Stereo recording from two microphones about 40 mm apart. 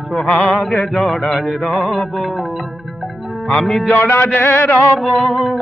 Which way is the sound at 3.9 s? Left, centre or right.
Left.